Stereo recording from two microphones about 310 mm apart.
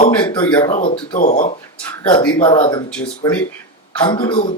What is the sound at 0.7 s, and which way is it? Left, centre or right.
Speech, left.